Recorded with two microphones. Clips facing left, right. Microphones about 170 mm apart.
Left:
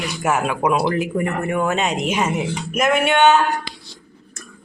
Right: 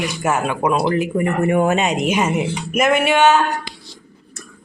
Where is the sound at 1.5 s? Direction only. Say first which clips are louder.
Right 4 dB; 20° right (ahead or behind).